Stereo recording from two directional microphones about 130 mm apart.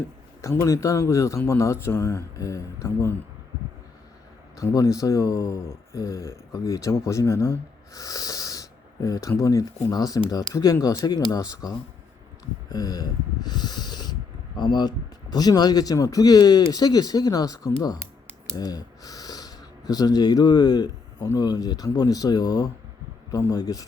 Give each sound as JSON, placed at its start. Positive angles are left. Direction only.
{"t": 0.4, "sound": "speech", "side_deg": 25}
{"t": 4.5, "sound": "speech", "side_deg": 25}
{"t": 12.6, "sound": "owl", "side_deg": 30}
{"t": 16.7, "sound": "speech", "side_deg": 30}